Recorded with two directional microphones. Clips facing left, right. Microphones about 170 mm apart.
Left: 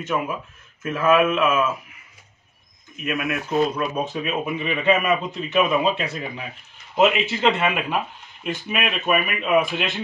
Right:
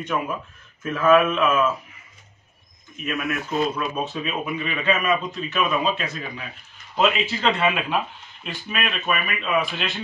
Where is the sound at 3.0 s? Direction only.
5° left (ahead or behind).